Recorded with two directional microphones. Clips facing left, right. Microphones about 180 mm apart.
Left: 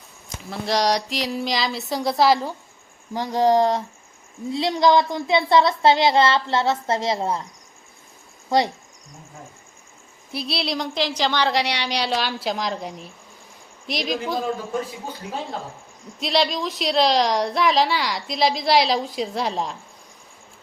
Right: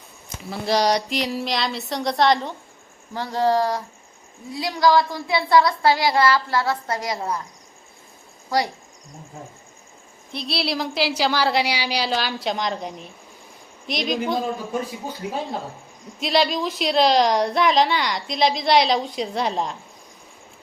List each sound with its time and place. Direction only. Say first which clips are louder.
0.3 s a woman's voice: right 2 dB; centre (ahead or behind)
3.2 s speech: left 2 dB; 15° left (ahead or behind)
8.4 s speech: left 3 dB; 25° left (ahead or behind)
10.3 s a woman's voice: even; centre (ahead or behind)
16.2 s a woman's voice: right 1 dB; centre (ahead or behind)